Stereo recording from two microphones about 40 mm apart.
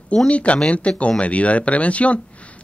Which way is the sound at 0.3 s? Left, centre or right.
Left.